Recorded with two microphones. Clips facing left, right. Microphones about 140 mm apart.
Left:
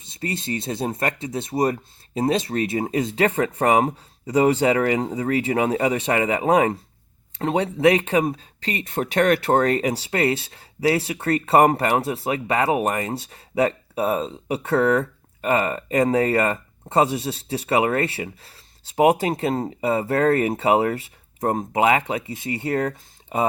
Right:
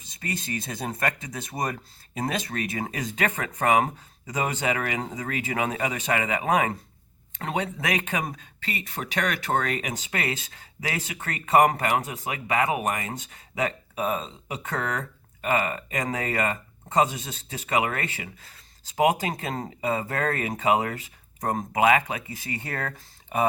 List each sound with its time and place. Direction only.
0.0 s speech: 25° left (ahead or behind)